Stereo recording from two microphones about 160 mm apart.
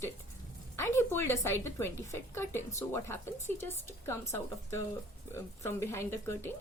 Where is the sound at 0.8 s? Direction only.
15° left (ahead or behind).